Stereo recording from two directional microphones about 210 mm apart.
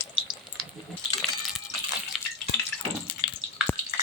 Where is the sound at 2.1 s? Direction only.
Centre (ahead or behind).